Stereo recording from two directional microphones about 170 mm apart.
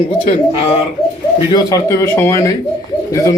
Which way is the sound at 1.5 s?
20° left (ahead or behind).